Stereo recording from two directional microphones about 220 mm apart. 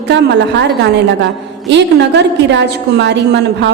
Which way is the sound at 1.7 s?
50° right (ahead or behind).